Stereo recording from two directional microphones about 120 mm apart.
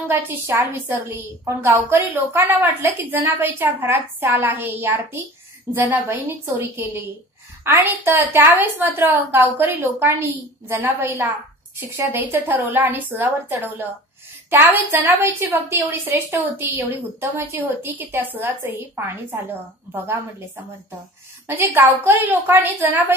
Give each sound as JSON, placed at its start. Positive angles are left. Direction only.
{"t": 0.1, "sound": "a woman's voice", "side_deg": -15}
{"t": 21.5, "sound": "a woman's voice", "side_deg": -20}